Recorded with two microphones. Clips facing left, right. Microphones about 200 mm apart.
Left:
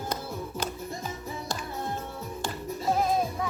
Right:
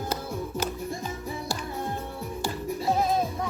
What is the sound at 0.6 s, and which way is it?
Music, 10° right (ahead or behind).